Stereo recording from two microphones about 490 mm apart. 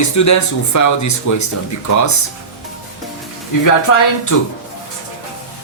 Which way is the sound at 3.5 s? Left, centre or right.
Left.